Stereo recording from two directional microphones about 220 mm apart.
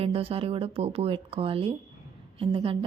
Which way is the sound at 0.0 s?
25° right (ahead or behind).